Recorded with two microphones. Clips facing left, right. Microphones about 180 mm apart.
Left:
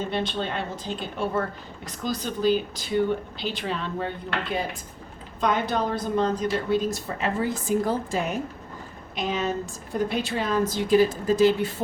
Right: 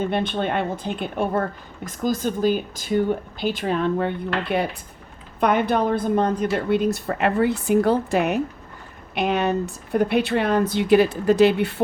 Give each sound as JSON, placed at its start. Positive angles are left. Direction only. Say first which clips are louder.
{"t": 0.0, "sound": "a woman's voice", "louder": "right 5 dB", "side_deg": -55}